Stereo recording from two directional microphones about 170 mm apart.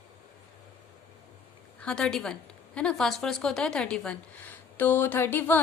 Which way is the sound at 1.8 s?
5° left (ahead or behind).